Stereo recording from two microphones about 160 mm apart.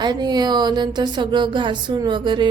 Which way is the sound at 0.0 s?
25° right (ahead or behind).